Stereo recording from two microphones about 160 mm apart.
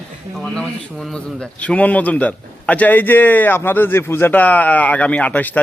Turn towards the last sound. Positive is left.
turn(degrees=10)  # may be behind; listen again after turning